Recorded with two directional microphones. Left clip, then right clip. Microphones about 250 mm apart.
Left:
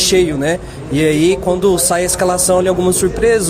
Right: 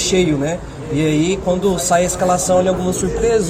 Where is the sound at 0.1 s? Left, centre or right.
Left.